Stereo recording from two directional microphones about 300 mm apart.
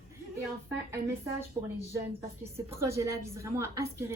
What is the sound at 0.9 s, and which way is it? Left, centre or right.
A woman's voice, centre.